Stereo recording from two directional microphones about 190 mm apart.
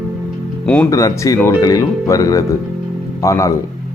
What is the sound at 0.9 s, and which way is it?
Speech, 15° left (ahead or behind).